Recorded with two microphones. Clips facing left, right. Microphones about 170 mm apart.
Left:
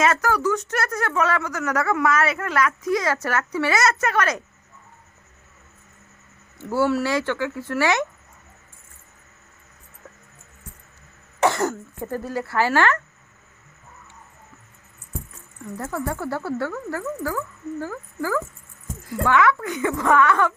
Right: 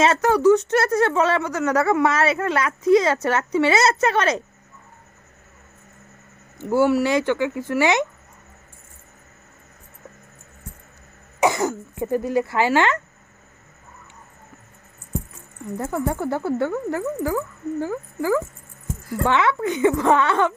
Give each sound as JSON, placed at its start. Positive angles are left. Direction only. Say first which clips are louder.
{"t": 0.0, "sound": "speech", "louder": "right 4 dB", "side_deg": -25}
{"t": 6.6, "sound": "speech", "louder": "right 3 dB", "side_deg": -15}
{"t": 11.3, "sound": "speech", "louder": "right 1 dB", "side_deg": -10}
{"t": 15.8, "sound": "speech", "louder": "right 3 dB", "side_deg": -20}